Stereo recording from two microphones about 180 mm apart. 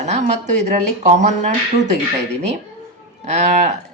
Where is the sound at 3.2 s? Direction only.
40° right (ahead or behind).